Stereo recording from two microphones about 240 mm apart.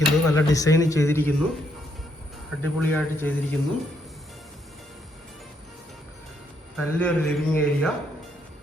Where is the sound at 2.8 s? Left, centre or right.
Centre.